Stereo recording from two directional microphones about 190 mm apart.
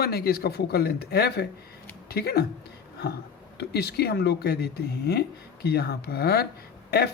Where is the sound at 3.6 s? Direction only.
60° left (ahead or behind).